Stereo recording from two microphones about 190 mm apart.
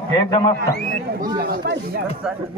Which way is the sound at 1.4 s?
55° right (ahead or behind).